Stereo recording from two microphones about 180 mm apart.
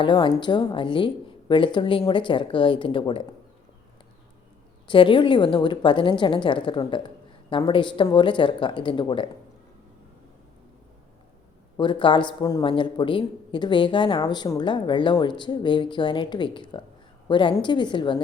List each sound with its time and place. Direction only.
0.0 s speech: 25° left (ahead or behind)
4.9 s speech: 25° left (ahead or behind)
11.8 s speech: 25° left (ahead or behind)